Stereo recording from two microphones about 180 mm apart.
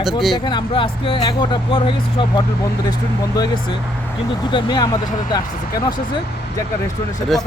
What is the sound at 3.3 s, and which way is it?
Speech, 25° left (ahead or behind).